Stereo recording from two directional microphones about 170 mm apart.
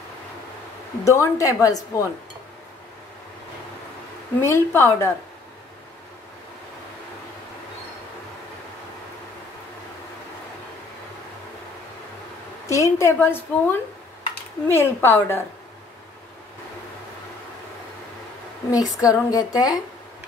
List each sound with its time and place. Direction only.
1.0 s a woman's voice: 20° left (ahead or behind)
4.4 s a woman's voice: 15° left (ahead or behind)
12.6 s a woman's voice: 15° left (ahead or behind)
18.7 s a woman's voice: 20° left (ahead or behind)